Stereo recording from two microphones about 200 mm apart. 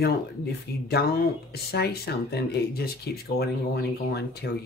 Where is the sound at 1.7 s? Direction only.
50° left (ahead or behind).